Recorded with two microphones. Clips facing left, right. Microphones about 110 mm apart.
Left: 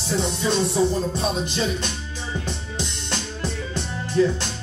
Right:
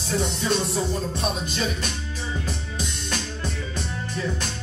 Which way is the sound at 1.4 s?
30° left (ahead or behind).